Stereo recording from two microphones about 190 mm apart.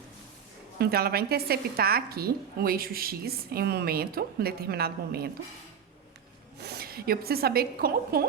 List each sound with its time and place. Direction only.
0.8 s a woman's voice: 55° right (ahead or behind)
6.6 s a woman's voice: 55° right (ahead or behind)